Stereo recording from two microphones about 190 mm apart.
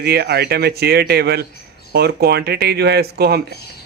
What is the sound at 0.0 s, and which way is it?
Speech, 55° right (ahead or behind).